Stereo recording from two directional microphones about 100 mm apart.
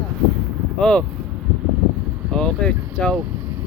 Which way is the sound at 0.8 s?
10° left (ahead or behind).